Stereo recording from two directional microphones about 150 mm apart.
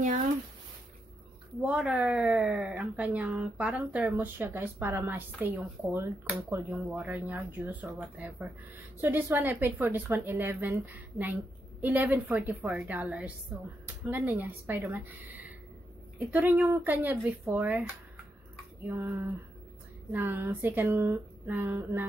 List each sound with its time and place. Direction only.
1.6 s speech: 10° right (ahead or behind)
18.9 s speech: 15° right (ahead or behind)